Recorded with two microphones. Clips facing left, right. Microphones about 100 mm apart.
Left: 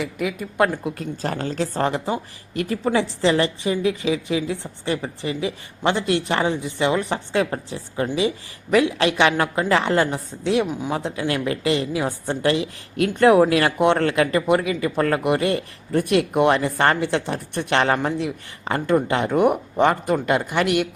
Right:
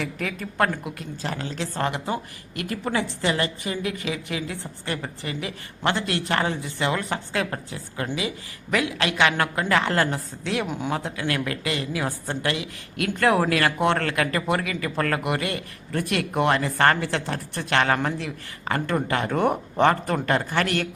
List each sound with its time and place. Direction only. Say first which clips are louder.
0.0 s speech: left 4 dB; 10° left (ahead or behind)
0.9 s a woman's voice: left 5 dB; 40° left (ahead or behind); by 10.7 s 20° left (ahead or behind)
10.7 s speech: left 2 dB; centre (ahead or behind)
10.9 s a woman's voice: left 4 dB; 25° left (ahead or behind)